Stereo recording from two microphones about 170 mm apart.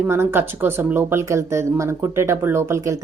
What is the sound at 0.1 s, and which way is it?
Speech, 15° right (ahead or behind).